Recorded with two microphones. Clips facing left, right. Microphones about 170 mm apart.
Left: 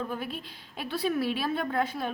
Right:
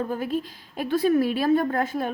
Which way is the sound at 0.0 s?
45° right (ahead or behind).